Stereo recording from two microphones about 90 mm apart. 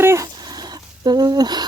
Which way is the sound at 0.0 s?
30° right (ahead or behind).